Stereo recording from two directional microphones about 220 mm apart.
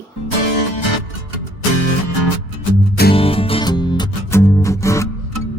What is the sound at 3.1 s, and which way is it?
Music, 25° left (ahead or behind).